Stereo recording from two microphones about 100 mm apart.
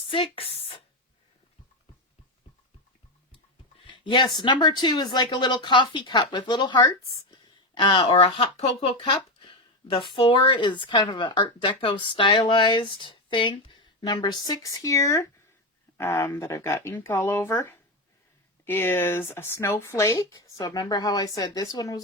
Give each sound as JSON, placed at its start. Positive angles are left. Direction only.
{"t": 0.0, "sound": "speech", "side_deg": 65}
{"t": 3.8, "sound": "a sound", "side_deg": 55}
{"t": 4.4, "sound": "speech", "side_deg": 50}